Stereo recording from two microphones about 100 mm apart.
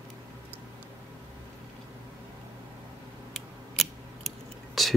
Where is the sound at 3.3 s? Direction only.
Centre (ahead or behind).